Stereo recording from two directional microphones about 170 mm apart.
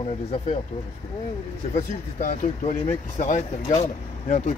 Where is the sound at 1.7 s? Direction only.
45° left (ahead or behind).